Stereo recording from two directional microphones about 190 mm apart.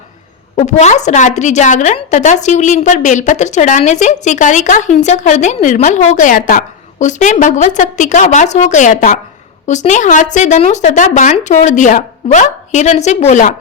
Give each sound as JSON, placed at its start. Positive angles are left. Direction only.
{"t": 0.5, "sound": "a woman's voice", "side_deg": 35}